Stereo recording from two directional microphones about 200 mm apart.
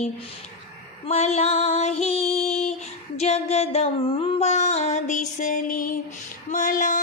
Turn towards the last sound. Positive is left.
turn(degrees=40)  # may be behind; listen again after turning